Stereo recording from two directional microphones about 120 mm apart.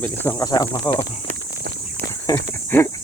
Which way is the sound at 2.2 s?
25° left (ahead or behind).